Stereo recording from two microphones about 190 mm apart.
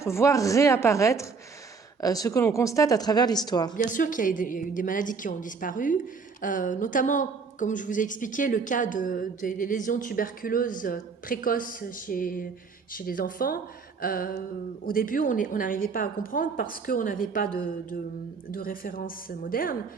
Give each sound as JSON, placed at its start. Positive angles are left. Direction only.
{"t": 0.0, "sound": "speech", "side_deg": 15}
{"t": 3.8, "sound": "a woman's voice", "side_deg": 45}